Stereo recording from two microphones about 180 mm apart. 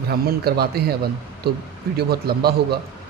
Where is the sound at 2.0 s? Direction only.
60° right (ahead or behind).